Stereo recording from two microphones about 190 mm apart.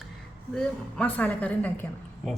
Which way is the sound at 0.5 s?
5° left (ahead or behind).